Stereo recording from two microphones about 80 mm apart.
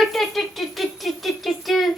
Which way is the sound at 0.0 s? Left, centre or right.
Centre.